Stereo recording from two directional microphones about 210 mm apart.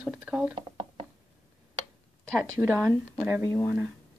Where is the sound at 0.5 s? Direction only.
25° right (ahead or behind).